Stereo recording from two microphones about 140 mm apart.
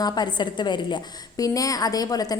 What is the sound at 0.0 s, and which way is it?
A woman's voice, 30° left (ahead or behind).